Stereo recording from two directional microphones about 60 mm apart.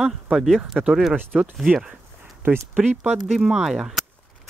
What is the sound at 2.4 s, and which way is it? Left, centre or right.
Speech, right.